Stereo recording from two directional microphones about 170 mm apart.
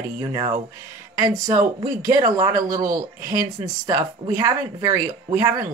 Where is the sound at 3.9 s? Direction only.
20° right (ahead or behind).